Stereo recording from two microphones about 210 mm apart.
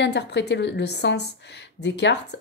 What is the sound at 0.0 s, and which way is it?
A woman's voice, 55° left (ahead or behind).